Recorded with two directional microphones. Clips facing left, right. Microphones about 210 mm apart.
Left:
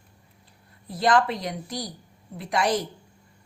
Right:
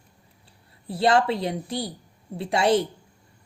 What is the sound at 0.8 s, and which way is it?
A woman's voice, 30° right (ahead or behind).